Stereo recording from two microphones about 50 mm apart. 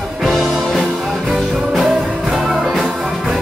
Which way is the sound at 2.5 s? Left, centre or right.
Centre.